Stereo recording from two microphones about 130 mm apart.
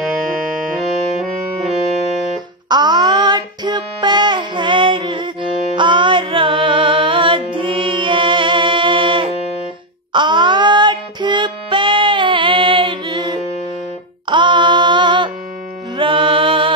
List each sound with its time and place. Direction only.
0.3 s music: 90° right
2.7 s child singing: 35° right (ahead or behind)
10.1 s a sound: 35° right (ahead or behind)
14.2 s music: 35° right (ahead or behind)